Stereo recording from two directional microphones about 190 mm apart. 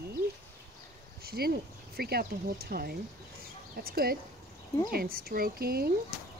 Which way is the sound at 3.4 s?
50° right (ahead or behind).